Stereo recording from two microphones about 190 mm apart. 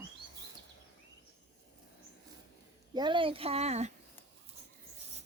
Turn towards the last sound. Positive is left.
turn(degrees=-35)  # may be behind; listen again after turning